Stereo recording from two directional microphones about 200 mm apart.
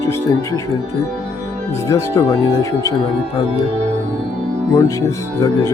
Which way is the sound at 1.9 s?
15° left (ahead or behind).